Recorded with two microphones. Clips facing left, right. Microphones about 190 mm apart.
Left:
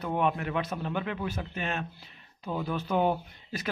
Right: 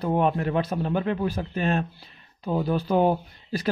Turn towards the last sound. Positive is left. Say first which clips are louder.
# right 6 dB
turn(degrees=-35)  # may be behind; listen again after turning